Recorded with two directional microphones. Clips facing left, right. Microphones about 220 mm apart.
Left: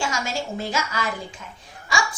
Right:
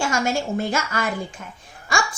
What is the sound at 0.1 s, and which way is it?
Speech, 55° right (ahead or behind).